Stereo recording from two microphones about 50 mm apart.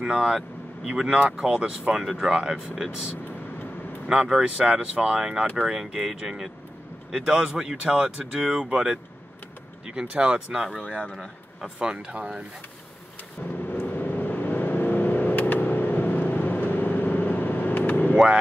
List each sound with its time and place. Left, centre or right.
0.0 s speech: centre
4.1 s speech: centre
10.5 s speech: centre
11.6 s speech: centre
13.4 s vehicle: left
18.1 s speech: right